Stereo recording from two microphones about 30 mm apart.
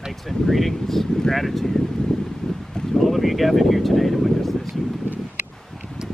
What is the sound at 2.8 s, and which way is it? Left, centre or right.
Boat, left.